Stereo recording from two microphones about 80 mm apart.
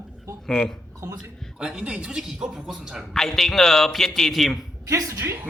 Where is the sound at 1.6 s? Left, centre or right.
Centre.